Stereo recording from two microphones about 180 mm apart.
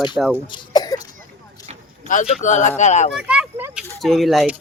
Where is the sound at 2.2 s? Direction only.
40° left (ahead or behind).